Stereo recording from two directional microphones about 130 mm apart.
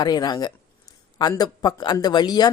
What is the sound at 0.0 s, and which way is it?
A woman's voice, 30° left (ahead or behind).